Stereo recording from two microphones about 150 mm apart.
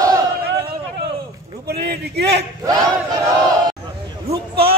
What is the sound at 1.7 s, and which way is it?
Speech, 90° right.